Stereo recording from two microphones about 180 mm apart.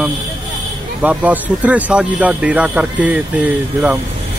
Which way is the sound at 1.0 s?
10° right (ahead or behind).